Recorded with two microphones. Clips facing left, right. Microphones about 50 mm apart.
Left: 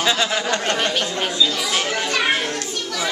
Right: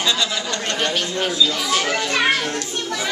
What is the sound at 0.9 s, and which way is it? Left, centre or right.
Speech, centre.